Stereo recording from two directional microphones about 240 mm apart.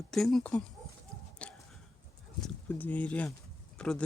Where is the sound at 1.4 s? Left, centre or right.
Centre.